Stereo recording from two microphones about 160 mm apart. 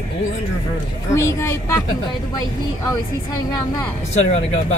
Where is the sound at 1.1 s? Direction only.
20° left (ahead or behind).